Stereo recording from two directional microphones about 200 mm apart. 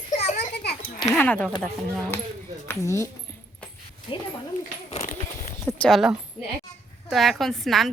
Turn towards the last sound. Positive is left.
turn(degrees=0)  # may be behind; listen again after turning